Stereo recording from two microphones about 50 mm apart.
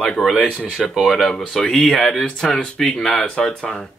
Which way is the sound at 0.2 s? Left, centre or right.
Centre.